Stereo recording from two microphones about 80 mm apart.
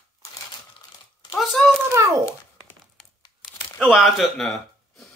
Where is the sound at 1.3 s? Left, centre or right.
Centre.